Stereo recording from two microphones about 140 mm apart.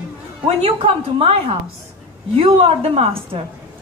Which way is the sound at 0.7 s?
40° right (ahead or behind).